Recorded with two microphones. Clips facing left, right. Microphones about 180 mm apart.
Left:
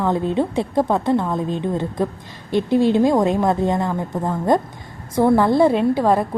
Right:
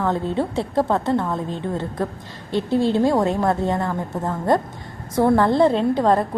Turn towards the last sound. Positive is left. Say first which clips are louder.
# left 1 dB
turn(degrees=10)  # may be behind; listen again after turning